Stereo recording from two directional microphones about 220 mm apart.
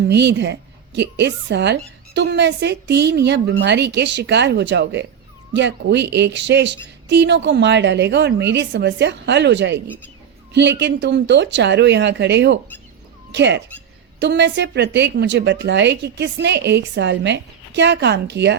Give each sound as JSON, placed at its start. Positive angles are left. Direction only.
{"t": 0.0, "sound": "speech", "side_deg": -50}